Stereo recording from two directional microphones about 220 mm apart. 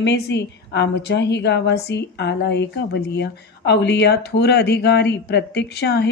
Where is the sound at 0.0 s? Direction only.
50° left (ahead or behind).